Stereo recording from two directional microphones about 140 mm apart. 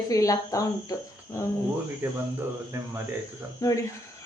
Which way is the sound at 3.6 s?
25° left (ahead or behind).